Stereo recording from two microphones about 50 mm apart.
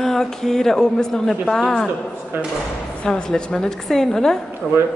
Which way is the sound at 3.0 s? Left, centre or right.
Centre.